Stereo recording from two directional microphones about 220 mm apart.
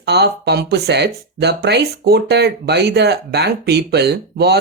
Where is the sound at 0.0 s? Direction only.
50° right (ahead or behind).